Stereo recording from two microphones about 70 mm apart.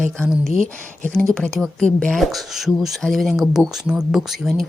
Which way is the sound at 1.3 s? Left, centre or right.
Centre.